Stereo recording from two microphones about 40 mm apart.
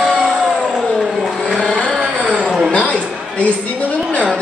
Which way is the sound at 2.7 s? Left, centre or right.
Left.